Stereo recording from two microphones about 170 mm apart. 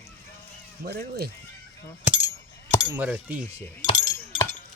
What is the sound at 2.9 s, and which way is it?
Speech, 10° right (ahead or behind).